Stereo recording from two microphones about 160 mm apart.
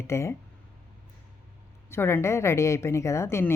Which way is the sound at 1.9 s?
15° left (ahead or behind).